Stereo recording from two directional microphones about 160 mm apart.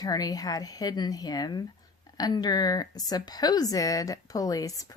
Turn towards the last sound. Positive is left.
turn(degrees=20)  # may be behind; listen again after turning